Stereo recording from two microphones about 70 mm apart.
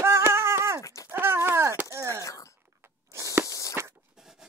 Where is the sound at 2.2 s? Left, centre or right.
Left.